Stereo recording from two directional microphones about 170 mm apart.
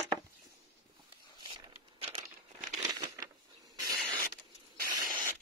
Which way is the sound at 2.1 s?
45° right (ahead or behind).